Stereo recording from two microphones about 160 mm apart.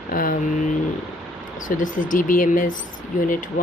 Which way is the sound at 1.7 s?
55° left (ahead or behind).